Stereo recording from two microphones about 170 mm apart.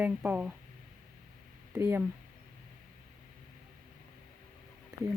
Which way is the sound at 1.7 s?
15° right (ahead or behind).